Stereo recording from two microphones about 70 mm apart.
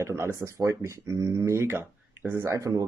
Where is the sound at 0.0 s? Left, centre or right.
Right.